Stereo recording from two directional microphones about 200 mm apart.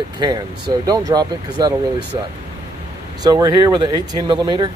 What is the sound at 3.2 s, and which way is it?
Speech, 20° right (ahead or behind).